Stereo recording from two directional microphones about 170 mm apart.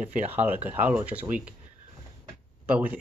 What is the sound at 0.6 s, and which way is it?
Speech, 10° right (ahead or behind).